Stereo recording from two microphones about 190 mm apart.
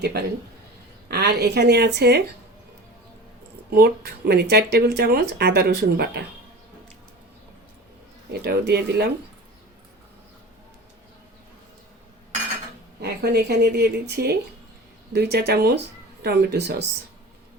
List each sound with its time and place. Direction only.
0.0 s speech: 55° right (ahead or behind)
3.7 s speech: 55° right (ahead or behind)
8.3 s speech: 60° right (ahead or behind)
13.0 s speech: 60° right (ahead or behind)